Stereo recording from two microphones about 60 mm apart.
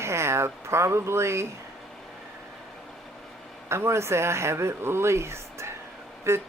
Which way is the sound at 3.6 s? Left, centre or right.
Right.